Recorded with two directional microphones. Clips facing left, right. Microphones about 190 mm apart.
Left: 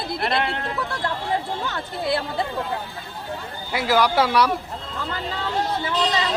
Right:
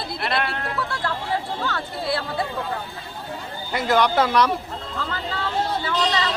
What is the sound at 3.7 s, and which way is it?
Speech, 5° left (ahead or behind).